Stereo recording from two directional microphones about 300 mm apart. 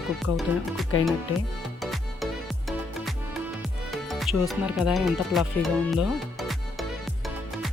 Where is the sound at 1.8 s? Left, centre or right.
Centre.